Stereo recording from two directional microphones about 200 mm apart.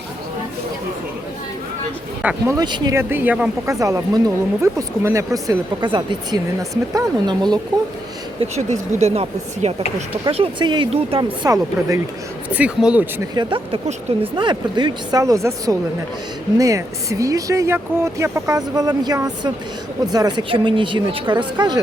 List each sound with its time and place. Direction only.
2.2 s speech: 15° right (ahead or behind)
8.4 s speech: 35° right (ahead or behind); by 11.9 s 15° right (ahead or behind)
12.5 s speech: 5° right (ahead or behind)
13.3 s speech: 20° right (ahead or behind)